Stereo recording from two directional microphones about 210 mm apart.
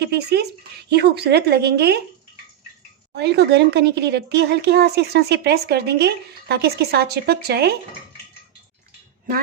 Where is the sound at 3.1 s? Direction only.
55° right (ahead or behind).